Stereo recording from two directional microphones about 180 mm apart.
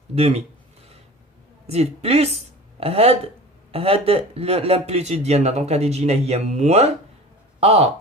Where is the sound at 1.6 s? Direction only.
35° right (ahead or behind).